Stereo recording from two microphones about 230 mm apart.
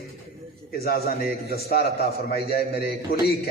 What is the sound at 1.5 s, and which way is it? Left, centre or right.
A man's voice, left.